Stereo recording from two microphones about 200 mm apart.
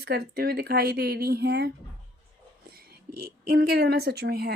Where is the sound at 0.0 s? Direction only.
50° right (ahead or behind).